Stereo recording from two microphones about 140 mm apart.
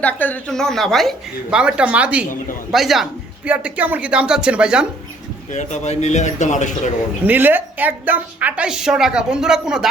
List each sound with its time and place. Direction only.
0.0 s a woman's voice: 10° left (ahead or behind); by 4.9 s 5° right (ahead or behind)
5.5 s speech: 55° left (ahead or behind)
7.3 s a woman's voice: 15° right (ahead or behind)